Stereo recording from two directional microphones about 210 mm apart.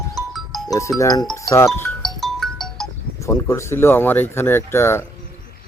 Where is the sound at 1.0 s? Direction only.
20° left (ahead or behind).